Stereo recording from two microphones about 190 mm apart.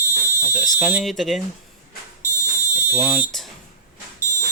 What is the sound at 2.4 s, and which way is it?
Smoke detector, 15° left (ahead or behind).